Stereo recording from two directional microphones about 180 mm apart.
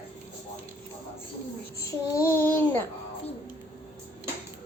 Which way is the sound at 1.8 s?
15° left (ahead or behind).